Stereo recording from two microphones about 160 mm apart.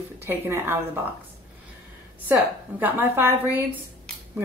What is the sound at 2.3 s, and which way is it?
Speech, 10° right (ahead or behind).